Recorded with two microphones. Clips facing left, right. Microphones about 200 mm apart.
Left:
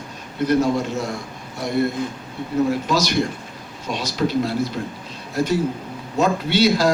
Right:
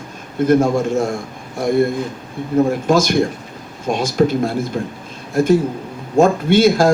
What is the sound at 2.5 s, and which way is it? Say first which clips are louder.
Speech: right 5 dB; 50° right (ahead or behind).